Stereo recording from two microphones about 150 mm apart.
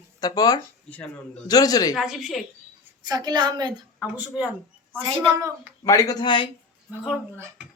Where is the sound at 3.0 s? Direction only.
25° right (ahead or behind).